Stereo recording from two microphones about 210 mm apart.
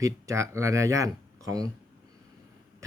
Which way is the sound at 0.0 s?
15° right (ahead or behind).